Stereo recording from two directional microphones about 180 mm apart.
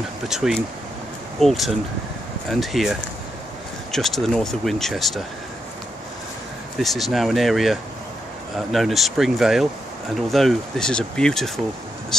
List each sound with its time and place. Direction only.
0.3 s speech: centre (ahead or behind)
6.8 s speech: centre (ahead or behind)
12.1 s vehicle: centre (ahead or behind)